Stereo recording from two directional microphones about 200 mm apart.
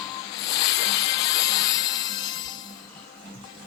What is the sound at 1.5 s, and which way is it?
Music, 20° left (ahead or behind).